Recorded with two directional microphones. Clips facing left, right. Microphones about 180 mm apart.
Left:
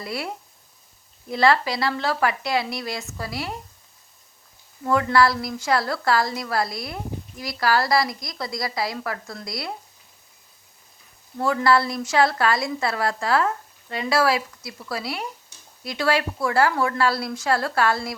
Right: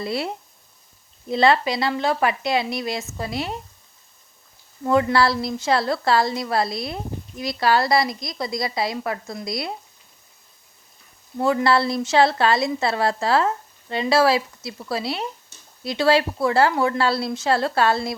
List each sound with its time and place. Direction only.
0.0 s a woman's voice: 25° right (ahead or behind)
1.3 s a woman's voice: 20° right (ahead or behind)
4.9 s a woman's voice: 25° right (ahead or behind)
11.3 s a woman's voice: 25° right (ahead or behind)